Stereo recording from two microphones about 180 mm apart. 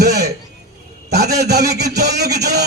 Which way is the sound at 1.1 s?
65° right (ahead or behind).